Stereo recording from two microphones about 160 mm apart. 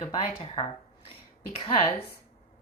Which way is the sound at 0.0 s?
30° left (ahead or behind).